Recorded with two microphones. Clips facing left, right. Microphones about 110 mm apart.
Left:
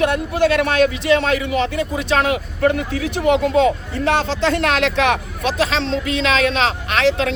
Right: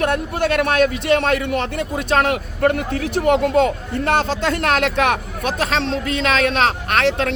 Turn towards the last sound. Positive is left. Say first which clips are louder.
# left 1 dB
turn(degrees=-50)  # may be behind; listen again after turning